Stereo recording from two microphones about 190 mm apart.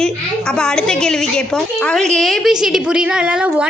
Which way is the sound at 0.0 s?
5° left (ahead or behind).